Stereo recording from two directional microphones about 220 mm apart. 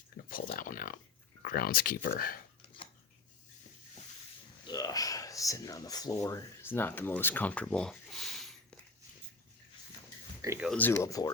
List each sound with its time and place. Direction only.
0.3 s a sound: 40° left (ahead or behind)
1.4 s speech: 40° left (ahead or behind)
4.6 s speech: 15° left (ahead or behind); by 8.4 s centre (ahead or behind)
10.4 s speech: 10° right (ahead or behind)
10.7 s speech: 10° left (ahead or behind)